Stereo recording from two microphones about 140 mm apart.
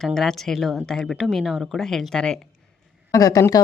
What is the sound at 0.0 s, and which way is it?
Speech, 5° left (ahead or behind).